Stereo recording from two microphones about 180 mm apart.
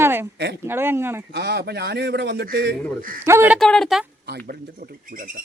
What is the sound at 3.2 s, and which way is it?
Speech, 10° right (ahead or behind).